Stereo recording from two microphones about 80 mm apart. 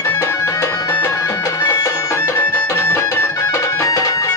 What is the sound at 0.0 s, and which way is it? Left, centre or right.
Music, left.